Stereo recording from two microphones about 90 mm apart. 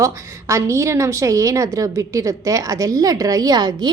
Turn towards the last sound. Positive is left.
turn(degrees=-50)  # may be behind; listen again after turning